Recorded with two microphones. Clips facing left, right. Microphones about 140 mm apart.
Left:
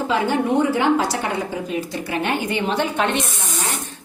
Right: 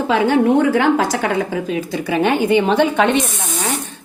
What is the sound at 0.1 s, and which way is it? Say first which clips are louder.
A woman's voice: right 6 dB; 90° right.